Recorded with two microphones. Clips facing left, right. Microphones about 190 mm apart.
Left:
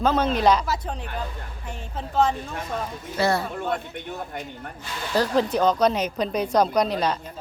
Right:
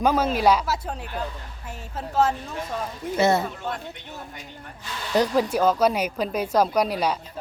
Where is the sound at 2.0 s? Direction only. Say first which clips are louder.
Even; 5° right (ahead or behind).